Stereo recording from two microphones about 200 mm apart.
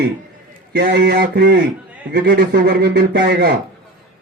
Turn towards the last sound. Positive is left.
turn(degrees=-55)  # may be behind; listen again after turning